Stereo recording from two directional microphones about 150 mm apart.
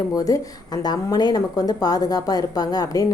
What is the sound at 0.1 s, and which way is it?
A woman's voice, 25° left (ahead or behind).